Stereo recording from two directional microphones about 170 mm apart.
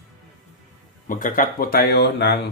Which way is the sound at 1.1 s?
50° left (ahead or behind).